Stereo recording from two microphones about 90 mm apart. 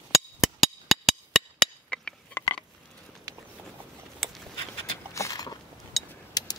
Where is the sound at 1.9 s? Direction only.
10° left (ahead or behind).